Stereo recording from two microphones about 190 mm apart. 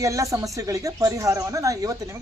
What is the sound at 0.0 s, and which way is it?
Speech, 15° right (ahead or behind).